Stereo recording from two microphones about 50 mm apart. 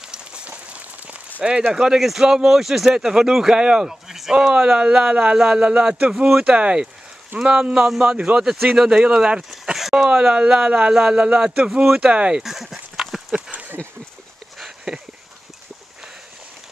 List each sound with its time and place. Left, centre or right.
0.5 s rain on surface: right
1.7 s speech: centre
9.8 s speech: centre; by 12.4 s right
12.4 s a sound: centre